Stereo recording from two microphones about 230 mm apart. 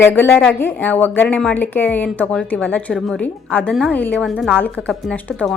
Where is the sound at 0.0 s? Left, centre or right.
Centre.